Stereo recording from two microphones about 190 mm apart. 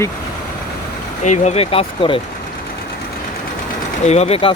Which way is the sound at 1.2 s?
35° left (ahead or behind).